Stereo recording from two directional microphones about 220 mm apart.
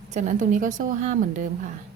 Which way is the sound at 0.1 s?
35° right (ahead or behind).